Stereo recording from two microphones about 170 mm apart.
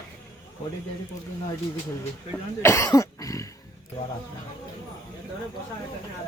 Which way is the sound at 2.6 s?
15° left (ahead or behind).